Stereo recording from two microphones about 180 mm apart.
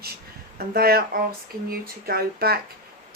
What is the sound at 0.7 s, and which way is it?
Speech, 60° right (ahead or behind).